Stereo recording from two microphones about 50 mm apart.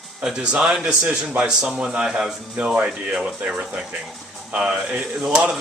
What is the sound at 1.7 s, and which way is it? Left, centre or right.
Speech, right.